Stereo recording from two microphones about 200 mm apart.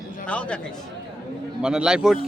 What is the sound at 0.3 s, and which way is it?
Speech, 5° left (ahead or behind).